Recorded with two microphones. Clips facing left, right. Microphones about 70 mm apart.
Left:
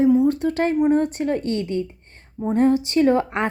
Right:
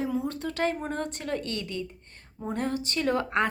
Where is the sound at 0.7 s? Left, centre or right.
Centre.